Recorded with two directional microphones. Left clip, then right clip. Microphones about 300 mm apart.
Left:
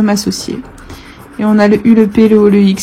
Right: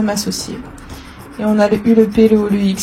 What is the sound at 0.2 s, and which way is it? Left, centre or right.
Speech, left.